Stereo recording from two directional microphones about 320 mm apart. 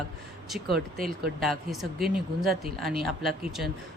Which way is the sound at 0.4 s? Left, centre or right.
Centre.